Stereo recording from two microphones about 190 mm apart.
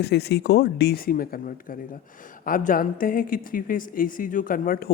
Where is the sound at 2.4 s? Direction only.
45° left (ahead or behind).